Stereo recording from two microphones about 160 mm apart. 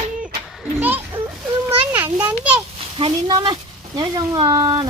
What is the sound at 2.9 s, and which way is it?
Speech, 30° right (ahead or behind).